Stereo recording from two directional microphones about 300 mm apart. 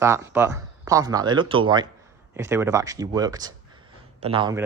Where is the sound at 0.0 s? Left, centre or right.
Centre.